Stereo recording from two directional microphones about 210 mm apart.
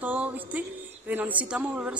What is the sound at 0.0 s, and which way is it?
A woman's voice, 5° right (ahead or behind).